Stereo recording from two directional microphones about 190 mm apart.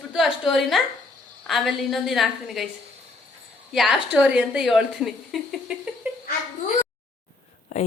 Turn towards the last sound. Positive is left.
turn(degrees=35)  # may be behind; listen again after turning